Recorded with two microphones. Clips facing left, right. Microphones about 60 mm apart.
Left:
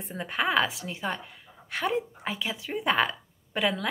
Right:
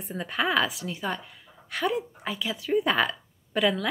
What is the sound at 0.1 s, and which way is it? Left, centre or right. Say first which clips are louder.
Speech: right 1 dB; left.